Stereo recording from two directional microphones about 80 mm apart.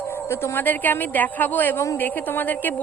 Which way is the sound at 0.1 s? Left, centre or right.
Left.